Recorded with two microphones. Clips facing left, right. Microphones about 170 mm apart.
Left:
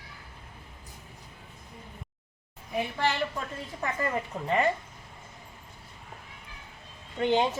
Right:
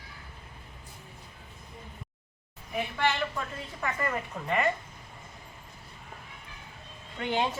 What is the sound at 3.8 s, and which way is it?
Speech, 30° left (ahead or behind).